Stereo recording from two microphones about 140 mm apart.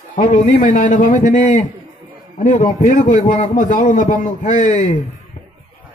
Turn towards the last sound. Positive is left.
turn(degrees=65)  # may be behind; listen again after turning